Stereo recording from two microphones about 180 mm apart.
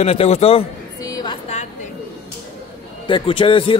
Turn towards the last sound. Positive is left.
turn(degrees=30)  # may be behind; listen again after turning